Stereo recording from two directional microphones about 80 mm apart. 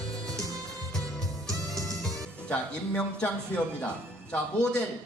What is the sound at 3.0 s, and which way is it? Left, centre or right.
Speech, centre.